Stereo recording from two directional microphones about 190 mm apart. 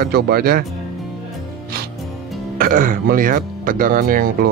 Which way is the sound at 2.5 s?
50° right (ahead or behind).